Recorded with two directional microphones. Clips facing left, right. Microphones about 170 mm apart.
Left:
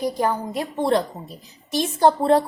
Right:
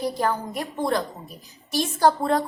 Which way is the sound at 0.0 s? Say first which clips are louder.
Left 2 dB; 15° left (ahead or behind).